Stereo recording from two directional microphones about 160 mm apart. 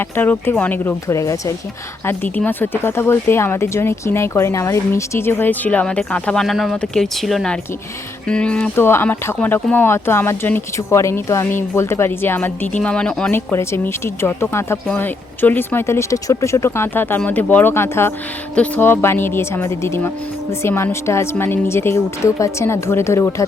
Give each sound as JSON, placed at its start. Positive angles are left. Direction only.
{"t": 0.0, "sound": "speech", "side_deg": 15}